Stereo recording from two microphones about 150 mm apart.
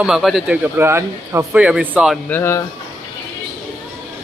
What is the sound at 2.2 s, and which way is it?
Speech, 15° left (ahead or behind).